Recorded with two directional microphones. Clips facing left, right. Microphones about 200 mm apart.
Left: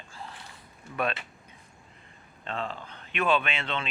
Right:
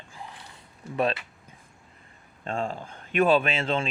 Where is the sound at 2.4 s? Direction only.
45° right (ahead or behind).